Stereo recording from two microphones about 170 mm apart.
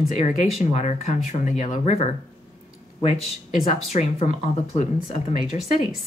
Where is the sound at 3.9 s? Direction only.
40° left (ahead or behind).